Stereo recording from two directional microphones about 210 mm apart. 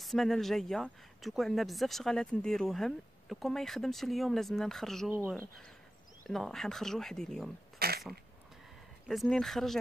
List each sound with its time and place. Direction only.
0.0 s speech: centre (ahead or behind)
6.2 s speech: centre (ahead or behind)
7.8 s a sound: 45° right (ahead or behind)
9.0 s speech: centre (ahead or behind)